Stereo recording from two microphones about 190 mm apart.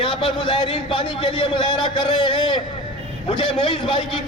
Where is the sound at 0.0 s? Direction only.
30° left (ahead or behind).